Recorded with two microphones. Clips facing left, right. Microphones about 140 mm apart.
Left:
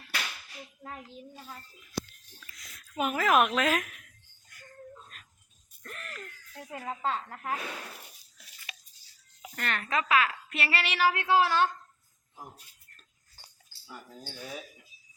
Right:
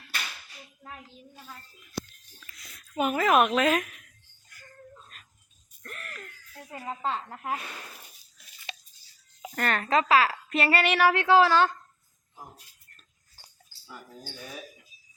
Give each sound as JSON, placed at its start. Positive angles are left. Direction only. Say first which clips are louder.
{"t": 2.6, "sound": "speech", "louder": "right 3 dB", "side_deg": 0}
{"t": 6.7, "sound": "a woman's voice", "louder": "right 1 dB", "side_deg": -5}
{"t": 9.6, "sound": "a woman's voice", "louder": "right 6 dB", "side_deg": -40}